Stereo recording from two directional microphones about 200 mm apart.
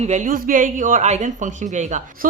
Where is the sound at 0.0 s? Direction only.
35° right (ahead or behind).